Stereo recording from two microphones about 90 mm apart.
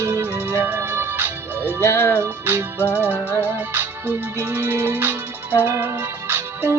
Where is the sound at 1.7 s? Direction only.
30° left (ahead or behind).